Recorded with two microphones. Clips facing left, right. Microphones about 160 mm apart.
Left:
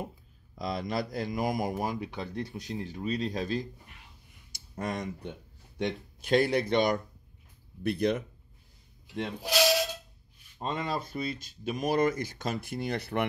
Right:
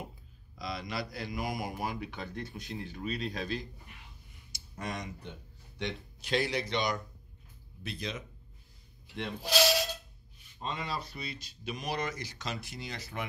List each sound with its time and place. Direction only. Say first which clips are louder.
0.6 s speech: left 6 dB; 50° left (ahead or behind)
4.7 s speech: left 5 dB; 50° left (ahead or behind)
9.4 s speech: left 1 dB; 15° left (ahead or behind)
10.6 s speech: left 5 dB; 50° left (ahead or behind)